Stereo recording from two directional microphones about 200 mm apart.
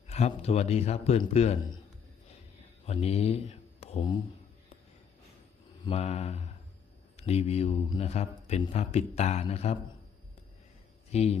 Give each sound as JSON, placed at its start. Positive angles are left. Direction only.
{"t": 0.1, "sound": "speech", "side_deg": 30}
{"t": 2.8, "sound": "speech", "side_deg": 30}
{"t": 5.8, "sound": "speech", "side_deg": 30}
{"t": 11.1, "sound": "speech", "side_deg": 30}